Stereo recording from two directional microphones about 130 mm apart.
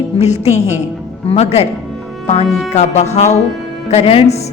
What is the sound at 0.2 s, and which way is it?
A woman's voice, 60° left (ahead or behind).